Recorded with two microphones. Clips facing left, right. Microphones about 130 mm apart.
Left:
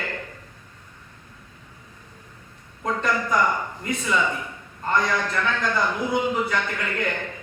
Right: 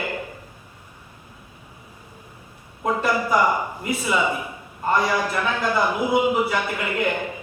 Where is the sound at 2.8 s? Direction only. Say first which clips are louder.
Right 3 dB; 15° right (ahead or behind).